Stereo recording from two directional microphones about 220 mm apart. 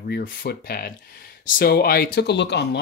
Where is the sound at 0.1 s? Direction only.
40° left (ahead or behind).